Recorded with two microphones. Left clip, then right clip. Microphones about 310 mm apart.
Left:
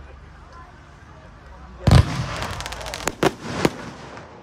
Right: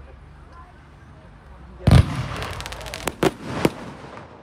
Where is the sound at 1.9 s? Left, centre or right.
Centre.